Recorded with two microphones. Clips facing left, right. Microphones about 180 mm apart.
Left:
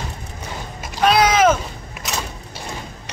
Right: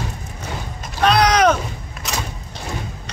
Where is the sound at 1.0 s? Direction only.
5° left (ahead or behind).